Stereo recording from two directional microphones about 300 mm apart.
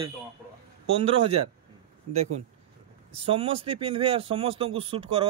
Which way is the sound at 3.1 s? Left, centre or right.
Centre.